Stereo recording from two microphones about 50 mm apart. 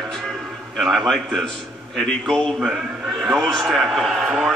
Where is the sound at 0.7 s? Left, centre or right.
Centre.